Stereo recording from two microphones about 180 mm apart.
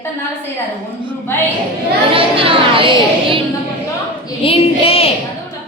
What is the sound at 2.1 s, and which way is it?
Speech, 30° right (ahead or behind).